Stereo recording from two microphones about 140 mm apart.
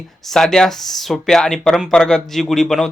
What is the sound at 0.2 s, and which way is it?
Speech, 5° left (ahead or behind).